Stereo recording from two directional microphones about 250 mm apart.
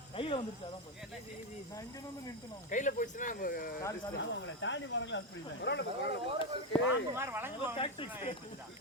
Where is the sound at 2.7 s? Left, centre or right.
Left.